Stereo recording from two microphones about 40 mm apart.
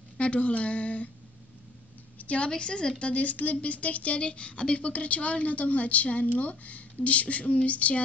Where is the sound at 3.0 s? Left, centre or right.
Left.